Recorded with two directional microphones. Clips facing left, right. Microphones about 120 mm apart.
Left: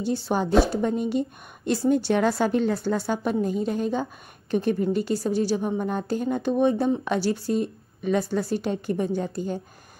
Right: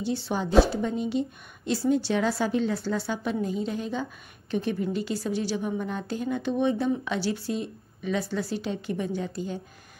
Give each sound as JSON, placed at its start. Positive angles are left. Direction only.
{"t": 0.0, "sound": "a woman's voice", "side_deg": 45}